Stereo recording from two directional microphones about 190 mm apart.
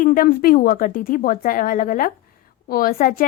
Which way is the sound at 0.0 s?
50° left (ahead or behind).